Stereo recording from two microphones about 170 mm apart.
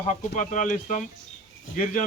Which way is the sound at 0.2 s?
50° left (ahead or behind).